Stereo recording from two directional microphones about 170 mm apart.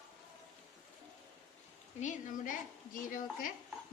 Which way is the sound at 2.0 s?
50° left (ahead or behind).